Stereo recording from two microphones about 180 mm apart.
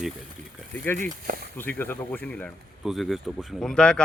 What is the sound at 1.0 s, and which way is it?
Speech, 45° right (ahead or behind).